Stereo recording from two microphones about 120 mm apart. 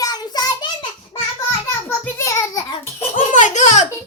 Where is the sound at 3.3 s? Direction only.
90° left.